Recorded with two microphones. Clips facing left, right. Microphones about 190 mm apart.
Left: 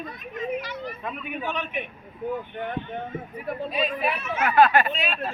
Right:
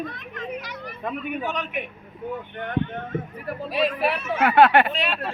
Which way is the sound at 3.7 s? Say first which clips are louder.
Right 5 dB; 75° right (ahead or behind).